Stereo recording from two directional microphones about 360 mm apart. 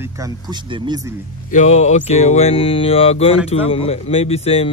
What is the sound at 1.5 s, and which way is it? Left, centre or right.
Speech, centre.